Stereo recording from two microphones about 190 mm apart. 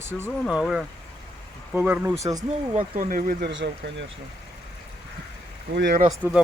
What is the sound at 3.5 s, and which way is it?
Speech, 70° right (ahead or behind).